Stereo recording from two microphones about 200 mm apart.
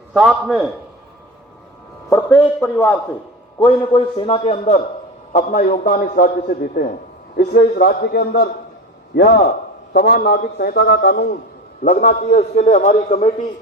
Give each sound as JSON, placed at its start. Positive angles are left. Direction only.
{"t": 0.1, "sound": "a man's voice", "side_deg": 0}
{"t": 2.0, "sound": "a man's voice", "side_deg": 10}
{"t": 3.6, "sound": "a man's voice", "side_deg": 25}
{"t": 11.8, "sound": "a man's voice", "side_deg": 40}